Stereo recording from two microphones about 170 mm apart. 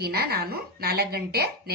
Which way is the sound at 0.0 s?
65° right (ahead or behind).